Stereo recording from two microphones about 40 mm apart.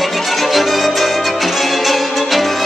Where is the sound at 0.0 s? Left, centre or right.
Centre.